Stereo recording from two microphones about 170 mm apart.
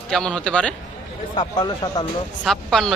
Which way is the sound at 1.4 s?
25° left (ahead or behind).